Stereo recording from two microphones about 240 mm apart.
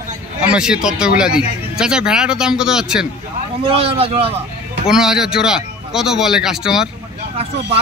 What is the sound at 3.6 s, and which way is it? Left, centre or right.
Speech, right.